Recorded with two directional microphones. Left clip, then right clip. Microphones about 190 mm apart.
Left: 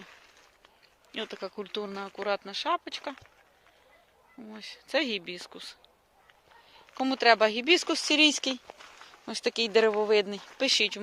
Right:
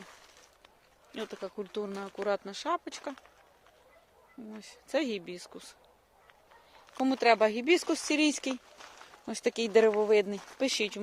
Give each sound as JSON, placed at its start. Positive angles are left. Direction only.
{"t": 1.1, "sound": "speech", "side_deg": 5}
{"t": 2.2, "sound": "speech", "side_deg": -15}
{"t": 4.4, "sound": "speech", "side_deg": 0}
{"t": 6.9, "sound": "speech", "side_deg": -5}
{"t": 9.2, "sound": "speech", "side_deg": -15}